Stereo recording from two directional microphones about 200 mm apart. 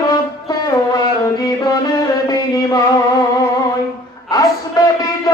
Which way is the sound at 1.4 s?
20° left (ahead or behind).